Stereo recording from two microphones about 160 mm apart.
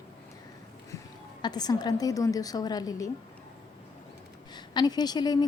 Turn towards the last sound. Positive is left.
turn(degrees=25)  # may be behind; listen again after turning